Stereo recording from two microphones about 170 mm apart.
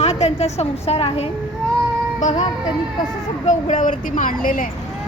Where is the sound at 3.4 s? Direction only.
45° left (ahead or behind).